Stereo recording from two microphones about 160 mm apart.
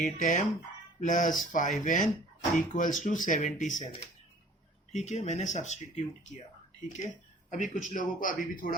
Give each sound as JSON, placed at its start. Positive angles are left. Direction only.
{"t": 0.0, "sound": "a man's voice", "side_deg": 50}
{"t": 4.9, "sound": "speech", "side_deg": 45}
{"t": 7.5, "sound": "a man's voice", "side_deg": 55}